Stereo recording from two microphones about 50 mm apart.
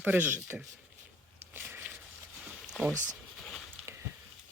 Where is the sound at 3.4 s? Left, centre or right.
Centre.